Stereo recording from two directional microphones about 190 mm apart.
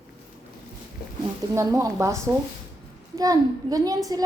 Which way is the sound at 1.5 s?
15° right (ahead or behind).